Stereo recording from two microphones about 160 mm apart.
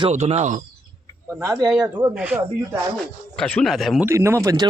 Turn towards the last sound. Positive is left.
turn(degrees=-20)  # may be behind; listen again after turning